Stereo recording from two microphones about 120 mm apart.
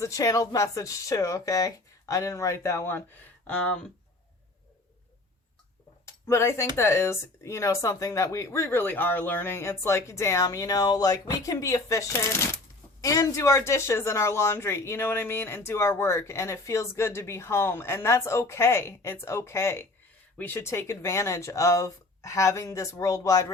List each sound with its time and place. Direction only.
0.0 s speech: 25° left (ahead or behind)
3.4 s speech: 10° left (ahead or behind)
6.2 s speech: 25° left (ahead or behind)